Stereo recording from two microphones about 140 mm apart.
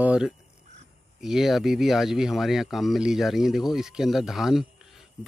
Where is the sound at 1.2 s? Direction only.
5° right (ahead or behind).